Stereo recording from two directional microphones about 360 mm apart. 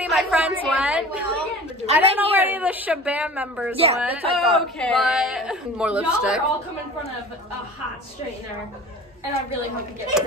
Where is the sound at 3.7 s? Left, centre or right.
Centre.